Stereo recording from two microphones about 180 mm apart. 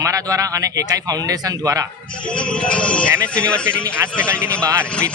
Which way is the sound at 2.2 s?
5° left (ahead or behind).